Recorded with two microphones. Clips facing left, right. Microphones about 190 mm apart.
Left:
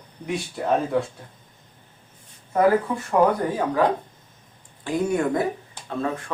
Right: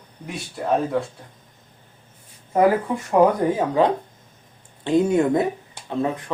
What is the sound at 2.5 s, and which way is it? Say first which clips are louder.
Speech: right 1 dB; 20° right (ahead or behind).